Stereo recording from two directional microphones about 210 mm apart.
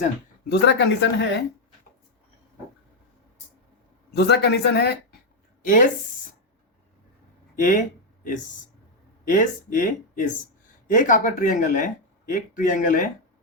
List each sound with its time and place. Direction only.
0.4 s speech: 55° left (ahead or behind)
4.1 s speech: 50° left (ahead or behind)
5.6 s speech: 40° left (ahead or behind)
7.6 s speech: 40° left (ahead or behind)